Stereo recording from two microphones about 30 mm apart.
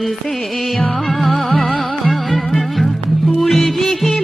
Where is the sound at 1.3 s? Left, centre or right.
Left.